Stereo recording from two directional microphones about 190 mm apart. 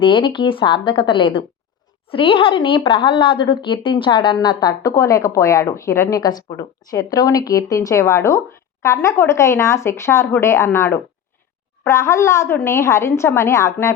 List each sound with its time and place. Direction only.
0.0 s a woman's voice: 25° left (ahead or behind)